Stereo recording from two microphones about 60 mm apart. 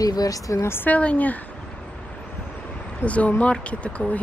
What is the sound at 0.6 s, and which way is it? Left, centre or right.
Speech, left.